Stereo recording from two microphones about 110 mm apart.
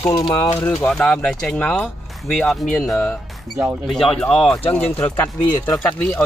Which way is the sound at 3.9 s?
5° left (ahead or behind).